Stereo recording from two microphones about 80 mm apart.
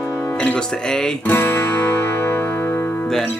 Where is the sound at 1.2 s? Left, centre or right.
Left.